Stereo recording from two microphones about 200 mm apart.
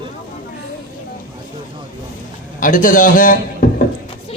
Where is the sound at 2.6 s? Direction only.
40° left (ahead or behind).